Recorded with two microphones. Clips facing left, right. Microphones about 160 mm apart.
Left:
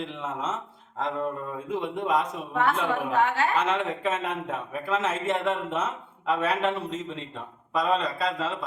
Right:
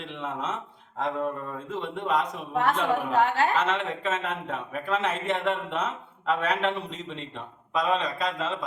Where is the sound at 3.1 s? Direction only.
35° right (ahead or behind).